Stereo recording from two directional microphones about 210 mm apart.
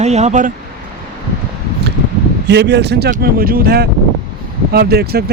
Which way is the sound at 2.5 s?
55° right (ahead or behind).